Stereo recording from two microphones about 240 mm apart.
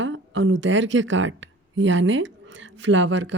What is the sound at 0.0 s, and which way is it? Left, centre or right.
A woman's voice, right.